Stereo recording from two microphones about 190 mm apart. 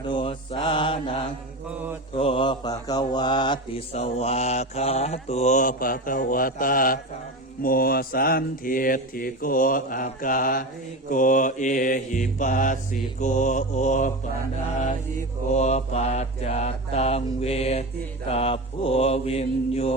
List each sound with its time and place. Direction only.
0.1 s mantra: 25° left (ahead or behind)
2.1 s mantra: 30° left (ahead or behind)
15.5 s mantra: 35° left (ahead or behind)